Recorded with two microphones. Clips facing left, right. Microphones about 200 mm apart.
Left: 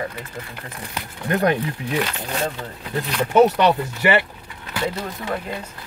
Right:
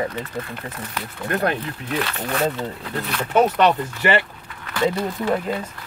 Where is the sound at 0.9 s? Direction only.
15° left (ahead or behind).